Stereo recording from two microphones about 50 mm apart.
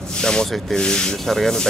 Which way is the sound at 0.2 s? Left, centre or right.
Centre.